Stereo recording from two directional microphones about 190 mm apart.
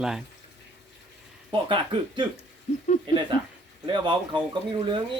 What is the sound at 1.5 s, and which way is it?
Speech, 25° right (ahead or behind).